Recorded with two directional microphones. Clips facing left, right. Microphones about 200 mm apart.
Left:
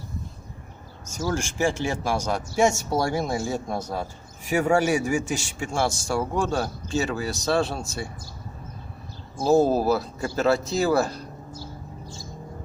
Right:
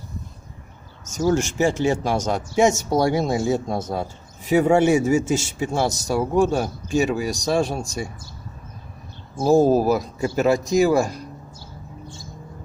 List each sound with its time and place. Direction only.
1.2 s speech: 20° right (ahead or behind)
9.4 s speech: 15° right (ahead or behind)